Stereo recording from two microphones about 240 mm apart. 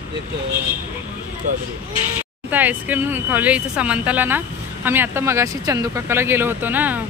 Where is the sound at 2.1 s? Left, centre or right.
Centre.